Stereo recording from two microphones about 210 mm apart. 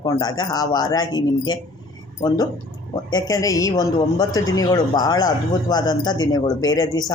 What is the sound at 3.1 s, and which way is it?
Speech, 15° left (ahead or behind).